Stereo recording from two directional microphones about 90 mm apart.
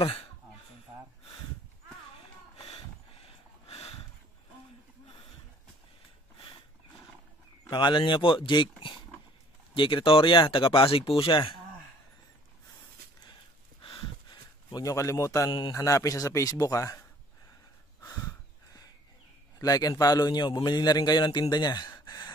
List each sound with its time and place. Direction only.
0.0 s speech: 90° left
2.5 s a sound: 90° left
7.7 s speech: 60° left (ahead or behind)
9.8 s speech: 65° left (ahead or behind)
14.7 s speech: 45° left (ahead or behind)
19.6 s a man's voice: 45° left (ahead or behind)